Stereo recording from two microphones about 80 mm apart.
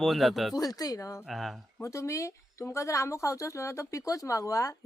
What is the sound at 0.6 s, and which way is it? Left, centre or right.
Speech, left.